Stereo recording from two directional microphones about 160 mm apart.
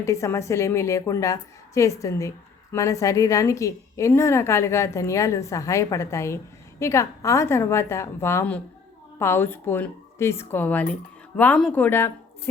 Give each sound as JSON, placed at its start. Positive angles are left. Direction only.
{"t": 0.0, "sound": "a woman's voice", "side_deg": 20}